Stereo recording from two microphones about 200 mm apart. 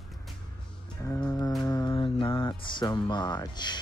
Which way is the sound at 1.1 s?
10° left (ahead or behind).